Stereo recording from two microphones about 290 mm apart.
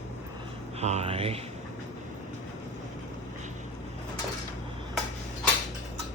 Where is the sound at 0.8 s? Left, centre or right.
Right.